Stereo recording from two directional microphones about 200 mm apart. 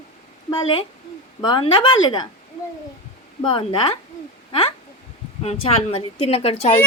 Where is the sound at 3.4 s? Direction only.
25° left (ahead or behind).